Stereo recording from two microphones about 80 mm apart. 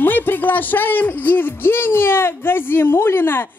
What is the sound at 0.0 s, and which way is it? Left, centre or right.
Speech, left.